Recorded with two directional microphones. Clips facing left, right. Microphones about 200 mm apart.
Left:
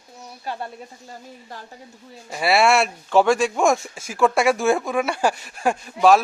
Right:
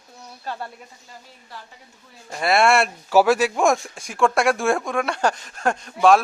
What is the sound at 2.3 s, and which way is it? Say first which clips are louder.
Speech: even; 5° left (ahead or behind).